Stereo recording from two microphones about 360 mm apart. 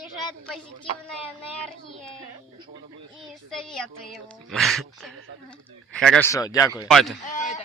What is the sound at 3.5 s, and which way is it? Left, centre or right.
Speech, centre.